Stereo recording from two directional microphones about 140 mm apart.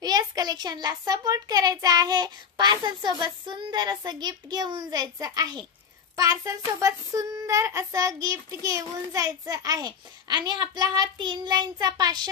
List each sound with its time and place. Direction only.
0.0 s speech: 30° right (ahead or behind)